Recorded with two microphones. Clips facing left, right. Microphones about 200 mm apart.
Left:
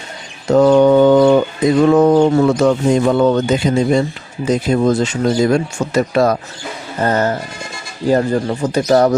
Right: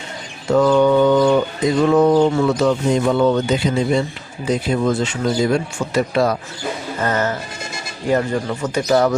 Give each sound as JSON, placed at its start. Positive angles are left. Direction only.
{"t": 0.4, "sound": "bird", "side_deg": 40}
{"t": 1.8, "sound": "speech", "side_deg": 45}
{"t": 7.0, "sound": "speech", "side_deg": 35}